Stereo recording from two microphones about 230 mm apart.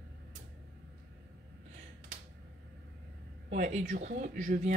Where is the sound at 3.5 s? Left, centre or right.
Right.